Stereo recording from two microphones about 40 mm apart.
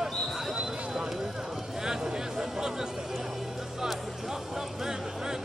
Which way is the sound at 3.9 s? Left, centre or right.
Centre.